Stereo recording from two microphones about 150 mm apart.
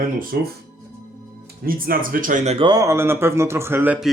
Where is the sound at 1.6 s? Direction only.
75° right (ahead or behind); by 2.5 s 60° right (ahead or behind).